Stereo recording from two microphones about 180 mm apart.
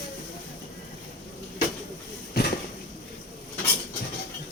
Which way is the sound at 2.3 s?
60° left (ahead or behind).